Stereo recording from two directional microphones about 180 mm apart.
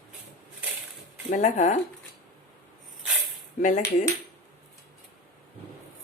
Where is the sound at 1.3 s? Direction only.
40° left (ahead or behind).